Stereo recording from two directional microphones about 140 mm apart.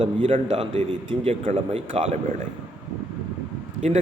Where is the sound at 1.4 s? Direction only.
50° right (ahead or behind).